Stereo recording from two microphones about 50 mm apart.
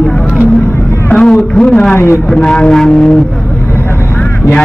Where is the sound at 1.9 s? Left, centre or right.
Left.